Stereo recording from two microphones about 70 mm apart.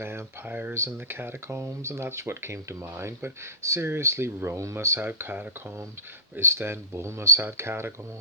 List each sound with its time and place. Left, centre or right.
0.0 s speech: right